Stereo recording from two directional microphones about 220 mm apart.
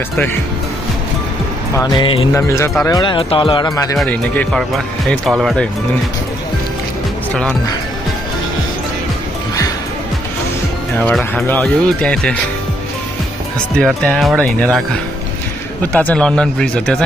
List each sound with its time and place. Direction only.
1.8 s music: 20° left (ahead or behind)
2.9 s speech: 20° left (ahead or behind); by 5.7 s centre (ahead or behind)
11.0 s speech: 5° left (ahead or behind)
13.7 s speech: 5° left (ahead or behind)
15.8 s speech: 5° left (ahead or behind)